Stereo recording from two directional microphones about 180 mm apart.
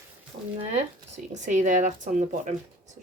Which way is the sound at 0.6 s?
40° right (ahead or behind).